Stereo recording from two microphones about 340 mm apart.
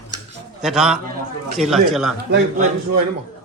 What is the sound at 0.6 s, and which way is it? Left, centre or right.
Speech, centre.